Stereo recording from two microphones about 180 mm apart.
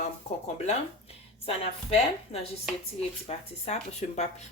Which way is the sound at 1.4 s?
35° left (ahead or behind).